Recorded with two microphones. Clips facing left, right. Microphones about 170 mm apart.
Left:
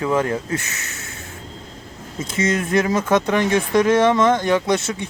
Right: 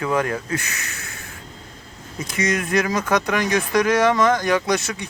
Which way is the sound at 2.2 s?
25° left (ahead or behind).